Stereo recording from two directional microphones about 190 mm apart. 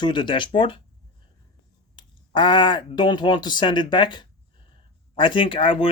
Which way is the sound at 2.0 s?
25° left (ahead or behind).